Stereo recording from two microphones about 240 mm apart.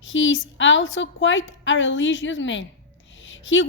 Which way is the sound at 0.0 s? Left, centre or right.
Left.